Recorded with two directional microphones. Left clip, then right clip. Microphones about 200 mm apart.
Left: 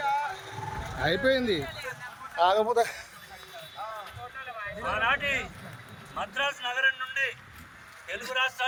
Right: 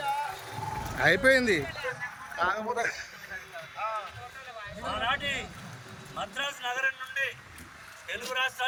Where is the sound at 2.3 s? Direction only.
40° left (ahead or behind).